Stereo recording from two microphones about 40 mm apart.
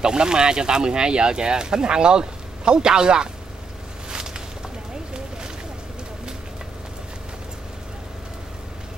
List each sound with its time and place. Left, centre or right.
0.0 s speech: centre